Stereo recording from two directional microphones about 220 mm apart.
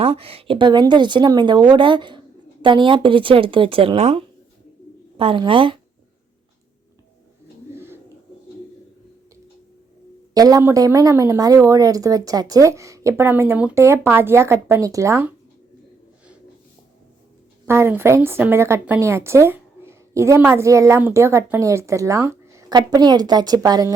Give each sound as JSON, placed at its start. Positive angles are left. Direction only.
{"t": 0.0, "sound": "a woman's voice", "side_deg": -25}
{"t": 10.3, "sound": "a woman's voice", "side_deg": -15}
{"t": 17.7, "sound": "a woman's voice", "side_deg": -10}